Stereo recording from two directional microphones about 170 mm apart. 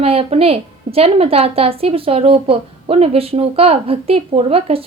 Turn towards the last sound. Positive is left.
turn(degrees=-35)  # may be behind; listen again after turning